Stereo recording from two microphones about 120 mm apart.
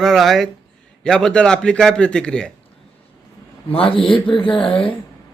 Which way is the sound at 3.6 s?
50° left (ahead or behind).